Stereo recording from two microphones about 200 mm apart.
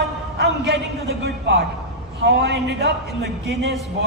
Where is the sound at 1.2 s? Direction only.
60° right (ahead or behind).